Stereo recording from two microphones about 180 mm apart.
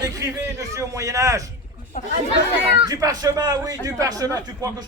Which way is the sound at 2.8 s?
20° right (ahead or behind).